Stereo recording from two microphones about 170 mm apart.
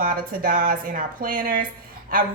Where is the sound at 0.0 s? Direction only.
55° right (ahead or behind).